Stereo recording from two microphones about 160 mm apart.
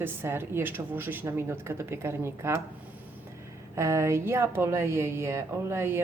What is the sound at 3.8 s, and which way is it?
A woman's voice, 15° right (ahead or behind).